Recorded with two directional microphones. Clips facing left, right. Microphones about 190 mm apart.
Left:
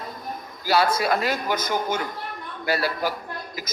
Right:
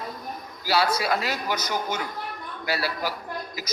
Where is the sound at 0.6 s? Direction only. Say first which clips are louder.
Left 3 dB; 50° left (ahead or behind).